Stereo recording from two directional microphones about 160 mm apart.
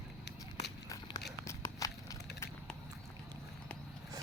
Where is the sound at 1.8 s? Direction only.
20° left (ahead or behind).